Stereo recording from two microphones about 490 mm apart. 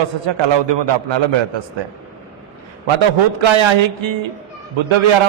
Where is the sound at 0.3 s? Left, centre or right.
Right.